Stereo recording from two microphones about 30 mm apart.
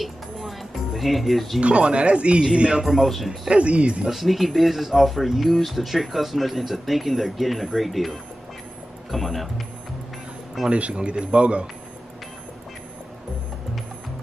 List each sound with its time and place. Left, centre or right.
0.0 s music: centre
1.6 s speech: right
2.8 s speech: centre
3.5 s speech: right
4.1 s speech: centre
10.7 s speech: right